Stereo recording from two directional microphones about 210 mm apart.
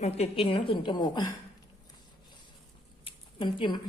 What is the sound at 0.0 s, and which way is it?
A woman's voice, 30° left (ahead or behind).